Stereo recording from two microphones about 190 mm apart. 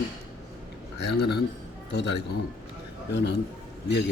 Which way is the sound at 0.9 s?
60° left (ahead or behind).